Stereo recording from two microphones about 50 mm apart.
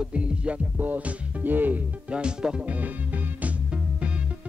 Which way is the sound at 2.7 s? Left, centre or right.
Right.